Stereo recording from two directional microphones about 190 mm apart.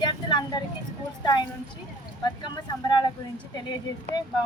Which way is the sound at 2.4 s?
25° left (ahead or behind).